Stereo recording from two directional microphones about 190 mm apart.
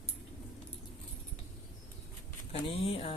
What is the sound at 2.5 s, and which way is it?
Speech, 30° left (ahead or behind).